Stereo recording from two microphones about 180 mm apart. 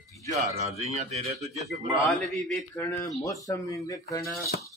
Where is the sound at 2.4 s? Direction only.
10° left (ahead or behind).